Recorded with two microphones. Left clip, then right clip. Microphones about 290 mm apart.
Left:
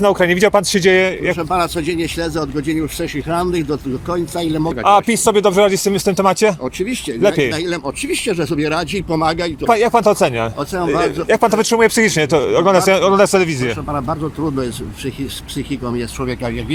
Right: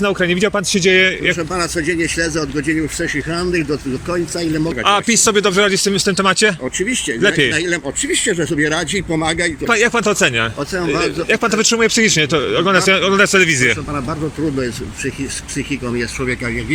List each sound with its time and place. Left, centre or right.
0.0 s speech: left
1.5 s speech: centre
7.5 s speech: centre